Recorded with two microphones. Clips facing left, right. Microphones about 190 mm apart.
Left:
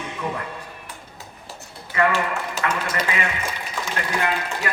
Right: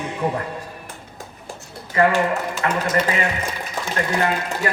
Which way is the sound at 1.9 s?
35° right (ahead or behind).